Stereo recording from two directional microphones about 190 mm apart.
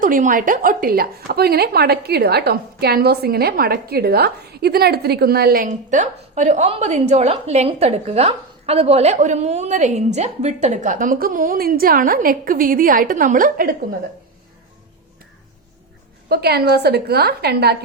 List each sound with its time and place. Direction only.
0.0 s a woman's voice: 45° right (ahead or behind)
16.3 s a woman's voice: 55° right (ahead or behind)